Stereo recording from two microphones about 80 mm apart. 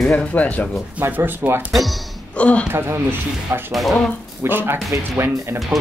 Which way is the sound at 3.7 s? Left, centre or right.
Centre.